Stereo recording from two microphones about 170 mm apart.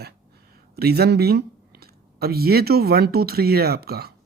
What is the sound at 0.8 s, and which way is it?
Speech, 70° right (ahead or behind).